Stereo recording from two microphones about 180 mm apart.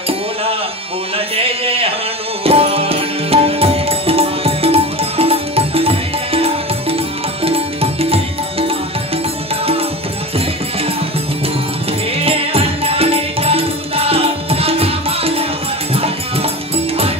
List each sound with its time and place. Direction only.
1.1 s a sound: 30° right (ahead or behind)
2.4 s music: 30° right (ahead or behind)
12.2 s music: 35° right (ahead or behind)